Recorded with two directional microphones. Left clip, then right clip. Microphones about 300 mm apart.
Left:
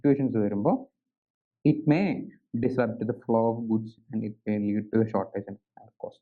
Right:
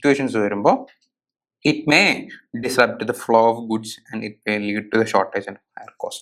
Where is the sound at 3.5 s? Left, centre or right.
Right.